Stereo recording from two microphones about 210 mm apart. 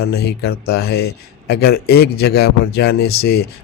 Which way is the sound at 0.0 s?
50° left (ahead or behind).